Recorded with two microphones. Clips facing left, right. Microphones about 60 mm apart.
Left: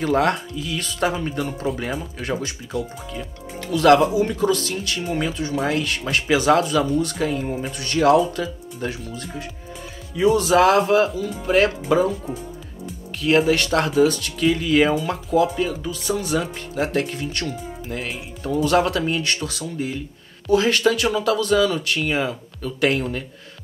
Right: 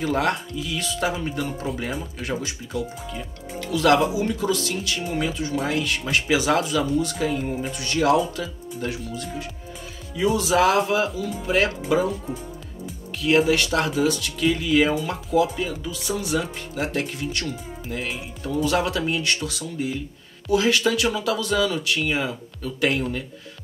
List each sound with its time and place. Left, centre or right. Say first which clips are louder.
0.0 s speech: left 3 dB; left
3.7 s speech: left 4 dB; left
10.1 s speech: left 4 dB; left
13.2 s speech: left 1 dB; left
18.5 s speech: left 4 dB; left